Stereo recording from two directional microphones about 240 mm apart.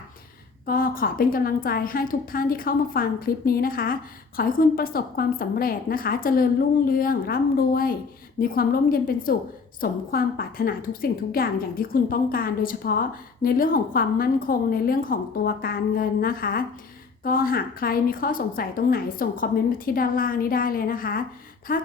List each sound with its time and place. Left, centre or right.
0.6 s a woman's voice: left